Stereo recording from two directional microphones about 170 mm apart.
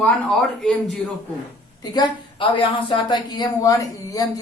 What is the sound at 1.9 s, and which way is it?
Speech, 30° left (ahead or behind).